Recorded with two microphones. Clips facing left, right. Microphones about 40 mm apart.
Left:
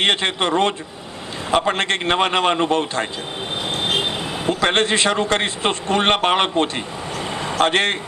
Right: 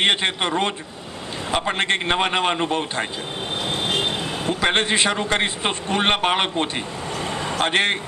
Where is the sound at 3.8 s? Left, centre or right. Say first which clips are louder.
Left 2 dB; centre.